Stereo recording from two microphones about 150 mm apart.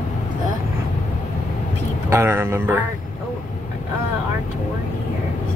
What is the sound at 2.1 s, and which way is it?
Speech, 15° right (ahead or behind).